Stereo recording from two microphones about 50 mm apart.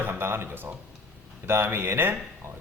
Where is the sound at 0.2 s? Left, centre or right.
Right.